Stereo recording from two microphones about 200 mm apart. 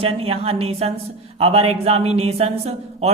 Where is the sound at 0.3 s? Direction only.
30° right (ahead or behind).